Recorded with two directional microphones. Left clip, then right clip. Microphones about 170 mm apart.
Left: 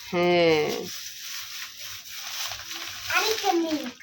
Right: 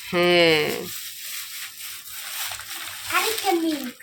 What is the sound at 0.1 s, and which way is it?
Speech, centre (ahead or behind).